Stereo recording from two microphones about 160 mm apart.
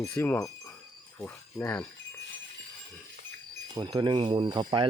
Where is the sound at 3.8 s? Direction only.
30° right (ahead or behind).